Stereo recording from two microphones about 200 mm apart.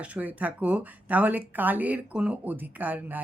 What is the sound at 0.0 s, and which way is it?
Speech, 5° right (ahead or behind).